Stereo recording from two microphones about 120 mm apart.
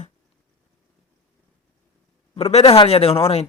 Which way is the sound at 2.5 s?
55° left (ahead or behind).